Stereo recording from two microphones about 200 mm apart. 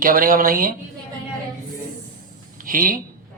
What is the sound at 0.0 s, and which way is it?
Speech, 45° right (ahead or behind).